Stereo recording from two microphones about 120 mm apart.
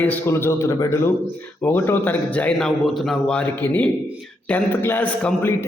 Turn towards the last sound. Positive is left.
turn(degrees=15)  # may be behind; listen again after turning